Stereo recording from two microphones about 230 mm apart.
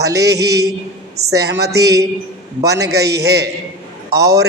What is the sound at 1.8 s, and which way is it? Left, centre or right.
Speech, centre.